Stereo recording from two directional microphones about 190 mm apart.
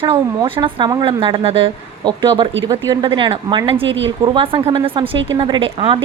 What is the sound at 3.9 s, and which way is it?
Speech, 75° right (ahead or behind).